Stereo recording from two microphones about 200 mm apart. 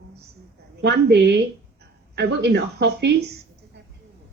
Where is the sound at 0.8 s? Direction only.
55° right (ahead or behind).